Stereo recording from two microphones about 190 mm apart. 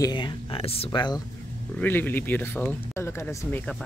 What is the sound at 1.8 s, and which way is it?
Speech, 10° left (ahead or behind).